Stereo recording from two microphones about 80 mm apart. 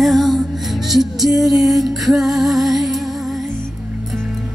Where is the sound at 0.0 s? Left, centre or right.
Centre.